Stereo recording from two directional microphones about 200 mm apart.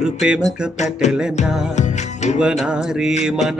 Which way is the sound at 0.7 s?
35° left (ahead or behind).